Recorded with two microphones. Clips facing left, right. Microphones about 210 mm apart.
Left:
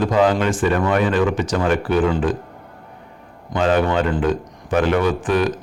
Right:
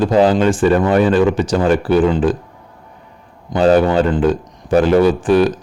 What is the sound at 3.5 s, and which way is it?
A man's voice, 35° right (ahead or behind).